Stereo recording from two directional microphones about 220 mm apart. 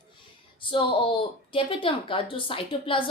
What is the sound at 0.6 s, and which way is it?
A woman's voice, 25° left (ahead or behind).